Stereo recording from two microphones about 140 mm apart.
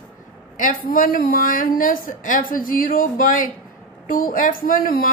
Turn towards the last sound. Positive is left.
turn(degrees=85)